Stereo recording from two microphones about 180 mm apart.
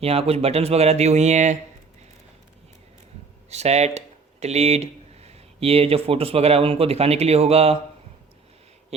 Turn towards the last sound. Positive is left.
turn(degrees=-35)  # may be behind; listen again after turning